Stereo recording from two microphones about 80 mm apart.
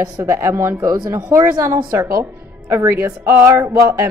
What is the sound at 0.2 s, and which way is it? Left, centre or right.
A woman's voice, right.